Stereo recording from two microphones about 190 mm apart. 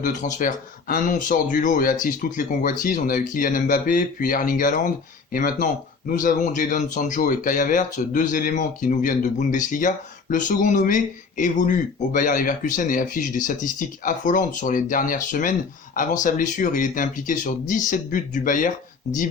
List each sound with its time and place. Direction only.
0.0 s speech: 40° left (ahead or behind)